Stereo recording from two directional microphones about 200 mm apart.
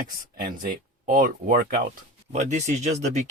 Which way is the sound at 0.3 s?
40° right (ahead or behind).